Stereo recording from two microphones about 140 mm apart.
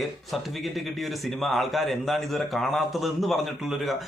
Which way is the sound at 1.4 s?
Centre (ahead or behind).